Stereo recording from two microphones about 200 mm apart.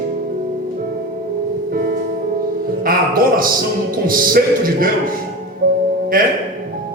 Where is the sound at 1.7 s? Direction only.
50° right (ahead or behind).